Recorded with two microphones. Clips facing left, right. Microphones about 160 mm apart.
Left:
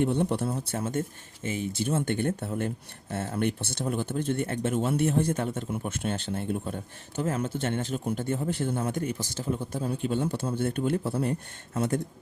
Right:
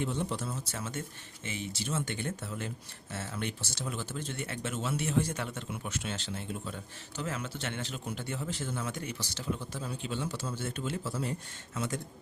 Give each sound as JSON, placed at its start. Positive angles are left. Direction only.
{"t": 0.0, "sound": "speech", "side_deg": 60}